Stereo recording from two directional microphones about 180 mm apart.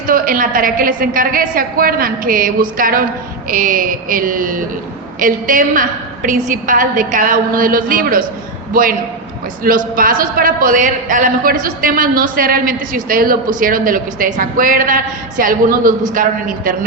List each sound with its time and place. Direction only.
0.1 s a man's voice: 50° right (ahead or behind)